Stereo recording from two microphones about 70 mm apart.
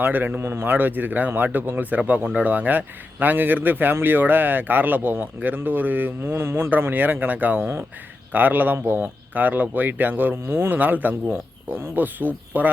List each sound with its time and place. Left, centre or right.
0.0 s speech: right
6.7 s speech: right